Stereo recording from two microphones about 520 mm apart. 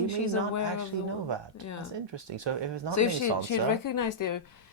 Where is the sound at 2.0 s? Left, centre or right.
Right.